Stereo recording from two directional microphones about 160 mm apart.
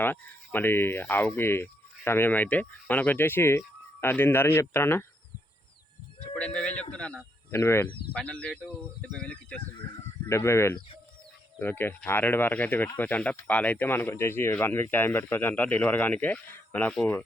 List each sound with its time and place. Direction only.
0.0 s speech: 10° left (ahead or behind)
6.3 s a sound: 5° left (ahead or behind)
6.9 s speech: 5° left (ahead or behind)
10.2 s speech: 15° left (ahead or behind)